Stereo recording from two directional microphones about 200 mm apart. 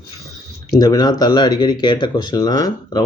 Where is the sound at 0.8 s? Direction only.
20° left (ahead or behind).